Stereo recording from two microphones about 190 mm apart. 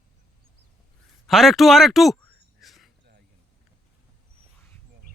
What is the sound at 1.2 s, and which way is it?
Speech, centre (ahead or behind).